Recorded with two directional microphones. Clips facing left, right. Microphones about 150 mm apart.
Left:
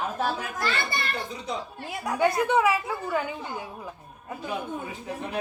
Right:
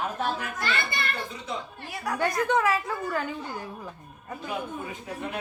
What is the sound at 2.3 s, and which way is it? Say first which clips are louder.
A woman's voice: left 2 dB; 5° left (ahead or behind).